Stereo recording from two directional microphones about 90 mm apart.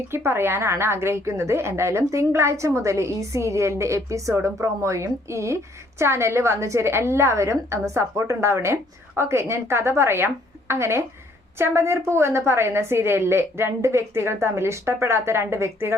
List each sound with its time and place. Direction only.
0.1 s a woman's voice: 25° right (ahead or behind)